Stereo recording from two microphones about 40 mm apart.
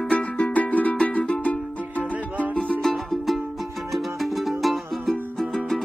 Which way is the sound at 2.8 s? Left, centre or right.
Centre.